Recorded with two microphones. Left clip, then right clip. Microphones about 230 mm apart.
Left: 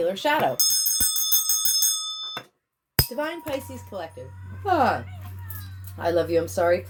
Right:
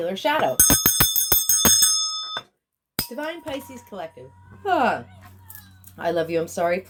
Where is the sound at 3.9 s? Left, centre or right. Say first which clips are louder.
Even; right.